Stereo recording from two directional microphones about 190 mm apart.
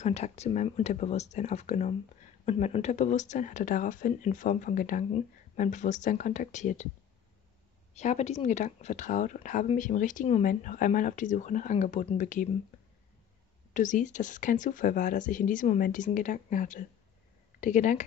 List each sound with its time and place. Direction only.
0.0 s speech: 35° left (ahead or behind)
7.9 s speech: 35° left (ahead or behind)
13.7 s speech: 40° left (ahead or behind)